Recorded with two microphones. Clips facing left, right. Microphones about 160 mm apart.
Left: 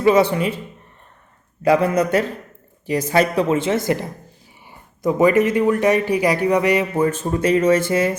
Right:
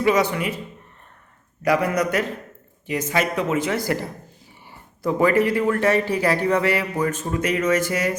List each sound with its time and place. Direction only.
0.0 s a man's voice: 30° left (ahead or behind)
1.6 s a man's voice: 25° left (ahead or behind)
5.0 s a man's voice: 20° left (ahead or behind)